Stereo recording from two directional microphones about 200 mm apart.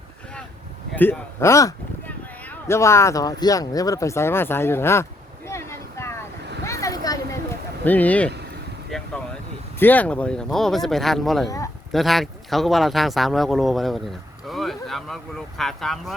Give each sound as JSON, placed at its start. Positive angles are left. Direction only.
{"t": 0.9, "sound": "speech", "side_deg": 10}
{"t": 5.5, "sound": "vehicle", "side_deg": 15}
{"t": 7.9, "sound": "speech", "side_deg": 10}
{"t": 8.9, "sound": "vehicle", "side_deg": 0}
{"t": 9.7, "sound": "speech", "side_deg": 10}
{"t": 11.4, "sound": "speech", "side_deg": 15}
{"t": 11.9, "sound": "speech", "side_deg": 0}